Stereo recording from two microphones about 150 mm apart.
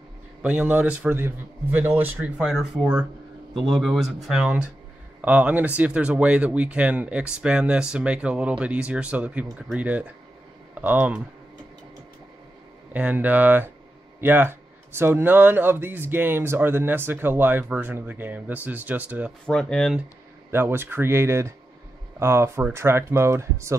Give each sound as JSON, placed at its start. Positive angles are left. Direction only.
{"t": 0.4, "sound": "a man's voice", "side_deg": -10}
{"t": 12.9, "sound": "a man's voice", "side_deg": -10}
{"t": 19.4, "sound": "speech", "side_deg": 5}
{"t": 20.5, "sound": "a man's voice", "side_deg": -15}